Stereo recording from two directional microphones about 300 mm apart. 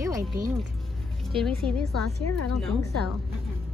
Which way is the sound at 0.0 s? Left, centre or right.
Centre.